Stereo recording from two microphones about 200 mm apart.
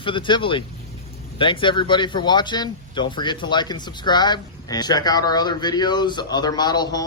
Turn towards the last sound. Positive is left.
turn(degrees=20)  # may be behind; listen again after turning